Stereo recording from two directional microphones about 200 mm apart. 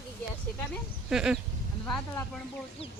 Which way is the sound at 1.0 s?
5° right (ahead or behind).